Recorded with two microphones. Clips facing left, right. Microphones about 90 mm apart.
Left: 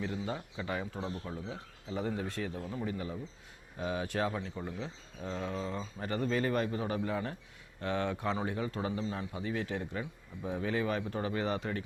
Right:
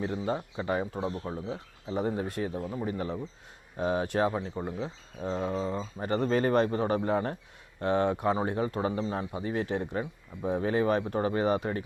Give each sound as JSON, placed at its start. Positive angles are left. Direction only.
{"t": 0.0, "sound": "a man's voice", "side_deg": -35}
{"t": 3.8, "sound": "a man's voice", "side_deg": -40}
{"t": 4.0, "sound": "speech", "side_deg": -20}
{"t": 6.1, "sound": "speech", "side_deg": -45}
{"t": 7.8, "sound": "speech", "side_deg": -25}
{"t": 8.4, "sound": "a man's voice", "side_deg": -40}
{"t": 11.4, "sound": "speech", "side_deg": -20}